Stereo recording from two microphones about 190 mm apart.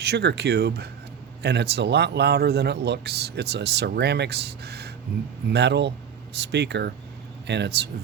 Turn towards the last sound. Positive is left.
turn(degrees=-65)  # may be behind; listen again after turning